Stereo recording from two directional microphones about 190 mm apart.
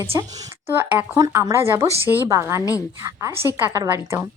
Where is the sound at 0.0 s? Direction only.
15° right (ahead or behind).